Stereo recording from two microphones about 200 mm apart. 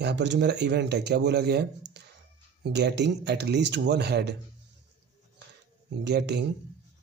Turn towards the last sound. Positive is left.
turn(degrees=-60)  # may be behind; listen again after turning